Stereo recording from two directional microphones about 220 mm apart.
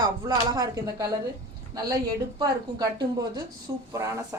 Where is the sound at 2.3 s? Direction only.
20° right (ahead or behind).